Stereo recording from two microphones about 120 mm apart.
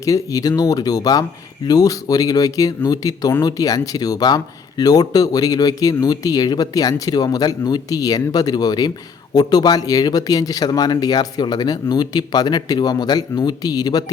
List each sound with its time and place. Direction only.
0.0 s speech: 25° left (ahead or behind)